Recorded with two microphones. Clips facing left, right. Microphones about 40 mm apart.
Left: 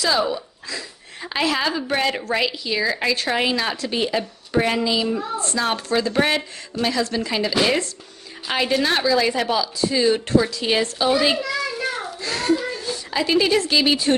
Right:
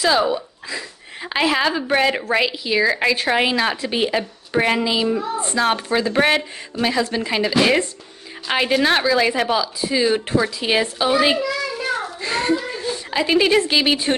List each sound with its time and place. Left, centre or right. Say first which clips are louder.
0.0 s a woman's voice: right 3 dB; centre
11.7 s child singing: right 2 dB; centre
12.2 s a sound: left 1 dB; right